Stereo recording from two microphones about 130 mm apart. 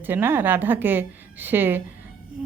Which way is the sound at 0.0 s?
15° right (ahead or behind).